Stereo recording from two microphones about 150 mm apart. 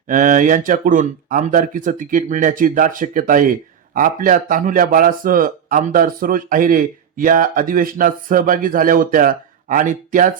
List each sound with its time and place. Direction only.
0.1 s speech: 60° right (ahead or behind)